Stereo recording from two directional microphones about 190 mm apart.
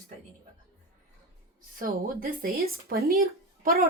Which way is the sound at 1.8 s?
50° right (ahead or behind).